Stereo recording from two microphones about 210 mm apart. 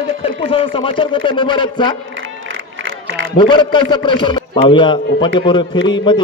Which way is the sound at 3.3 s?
20° left (ahead or behind).